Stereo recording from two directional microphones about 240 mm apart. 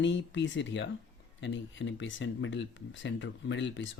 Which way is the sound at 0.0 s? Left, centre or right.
Left.